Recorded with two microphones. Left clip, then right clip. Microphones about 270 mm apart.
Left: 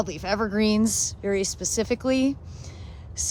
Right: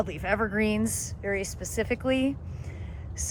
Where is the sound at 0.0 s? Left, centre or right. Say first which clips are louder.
Left 1 dB; centre.